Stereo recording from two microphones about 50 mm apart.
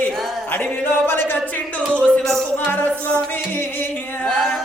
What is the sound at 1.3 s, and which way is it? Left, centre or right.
Speech, left.